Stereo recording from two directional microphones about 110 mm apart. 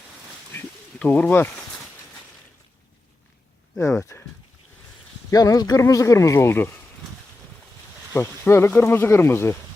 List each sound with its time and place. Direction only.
0.5 s a sound: 15° left (ahead or behind)
3.8 s speech: 25° left (ahead or behind)
5.3 s speech: 35° left (ahead or behind)
8.1 s speech: 25° left (ahead or behind)